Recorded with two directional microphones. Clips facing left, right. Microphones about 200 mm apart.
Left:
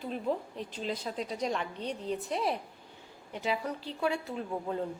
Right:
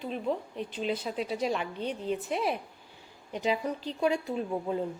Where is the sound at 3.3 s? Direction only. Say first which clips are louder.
Right 3 dB; 20° right (ahead or behind).